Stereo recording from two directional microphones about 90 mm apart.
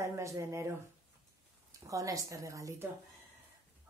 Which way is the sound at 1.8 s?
40° right (ahead or behind).